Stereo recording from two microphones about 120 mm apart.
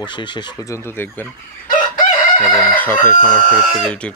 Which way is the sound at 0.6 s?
20° left (ahead or behind).